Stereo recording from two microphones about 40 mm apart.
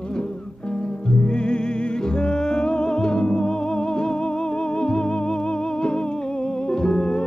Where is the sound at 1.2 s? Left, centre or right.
Left.